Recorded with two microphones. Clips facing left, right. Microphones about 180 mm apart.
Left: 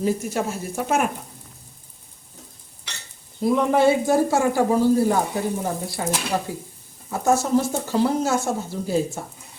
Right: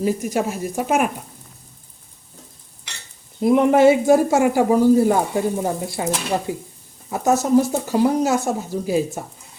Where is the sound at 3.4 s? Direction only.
20° right (ahead or behind).